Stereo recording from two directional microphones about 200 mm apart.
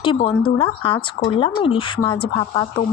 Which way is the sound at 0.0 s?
25° left (ahead or behind).